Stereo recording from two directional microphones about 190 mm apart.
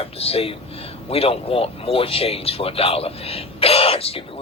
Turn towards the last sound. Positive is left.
turn(degrees=30)  # may be behind; listen again after turning